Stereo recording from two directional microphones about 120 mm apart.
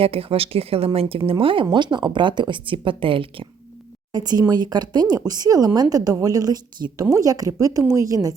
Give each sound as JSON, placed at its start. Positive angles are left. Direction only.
{"t": 0.0, "sound": "speech", "side_deg": -50}
{"t": 4.1, "sound": "speech", "side_deg": -35}